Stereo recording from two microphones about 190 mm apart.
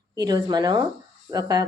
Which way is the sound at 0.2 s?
20° right (ahead or behind).